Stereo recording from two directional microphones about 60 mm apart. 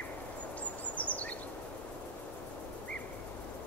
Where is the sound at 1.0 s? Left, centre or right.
Left.